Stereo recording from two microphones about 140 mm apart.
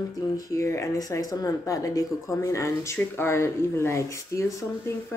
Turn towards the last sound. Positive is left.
turn(degrees=20)  # may be behind; listen again after turning